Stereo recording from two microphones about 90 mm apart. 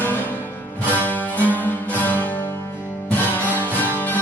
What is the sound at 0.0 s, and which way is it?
Music, 20° left (ahead or behind).